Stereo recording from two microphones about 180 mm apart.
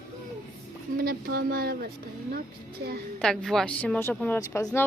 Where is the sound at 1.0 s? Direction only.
60° right (ahead or behind).